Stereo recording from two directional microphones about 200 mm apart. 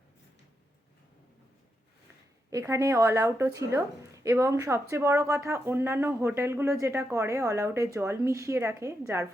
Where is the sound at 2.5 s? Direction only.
15° right (ahead or behind).